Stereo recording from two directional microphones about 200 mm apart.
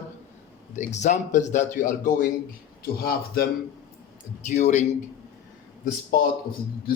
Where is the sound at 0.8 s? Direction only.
35° left (ahead or behind).